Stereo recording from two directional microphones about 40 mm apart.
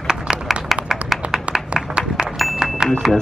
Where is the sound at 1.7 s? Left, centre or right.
Right.